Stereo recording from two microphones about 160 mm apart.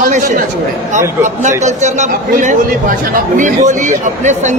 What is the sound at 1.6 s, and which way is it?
A man's voice, 45° right (ahead or behind).